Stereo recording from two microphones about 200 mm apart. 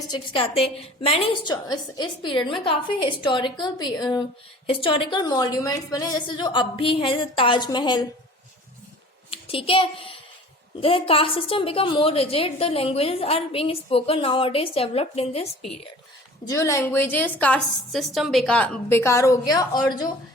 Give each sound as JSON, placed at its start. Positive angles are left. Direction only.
{"t": 0.1, "sound": "a woman's voice", "side_deg": 25}
{"t": 9.3, "sound": "a child's voice", "side_deg": 25}
{"t": 16.5, "sound": "a woman's voice", "side_deg": 15}